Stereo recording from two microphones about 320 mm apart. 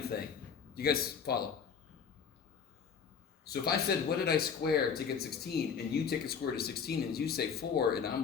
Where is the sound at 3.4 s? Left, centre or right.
Left.